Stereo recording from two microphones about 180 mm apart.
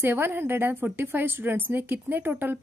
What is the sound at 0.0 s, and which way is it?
A woman's voice, 15° right (ahead or behind).